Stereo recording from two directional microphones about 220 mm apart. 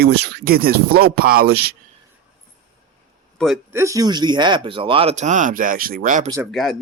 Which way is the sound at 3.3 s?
Centre (ahead or behind).